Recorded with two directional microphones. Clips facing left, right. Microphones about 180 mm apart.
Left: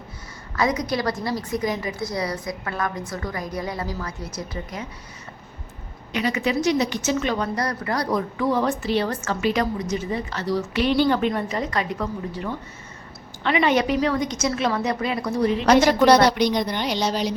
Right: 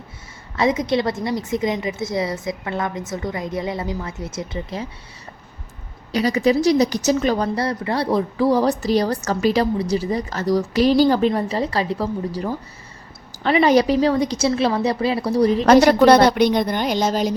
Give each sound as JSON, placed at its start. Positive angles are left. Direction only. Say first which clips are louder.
{"t": 0.5, "sound": "a woman's voice", "louder": "right 4 dB", "side_deg": -25}
{"t": 6.1, "sound": "a woman's voice", "louder": "right 6 dB", "side_deg": -35}
{"t": 15.6, "sound": "a woman's voice", "louder": "right 4 dB", "side_deg": -50}
{"t": 16.0, "sound": "a woman's voice", "louder": "right 3 dB", "side_deg": -55}